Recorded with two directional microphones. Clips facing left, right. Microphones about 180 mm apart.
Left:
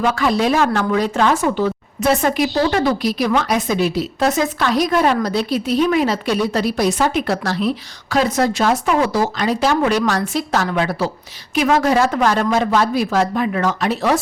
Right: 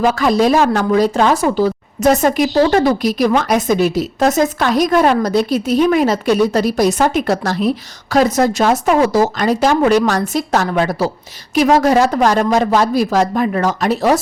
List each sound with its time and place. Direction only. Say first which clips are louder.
0.0 s speech: right 4 dB; 40° right (ahead or behind)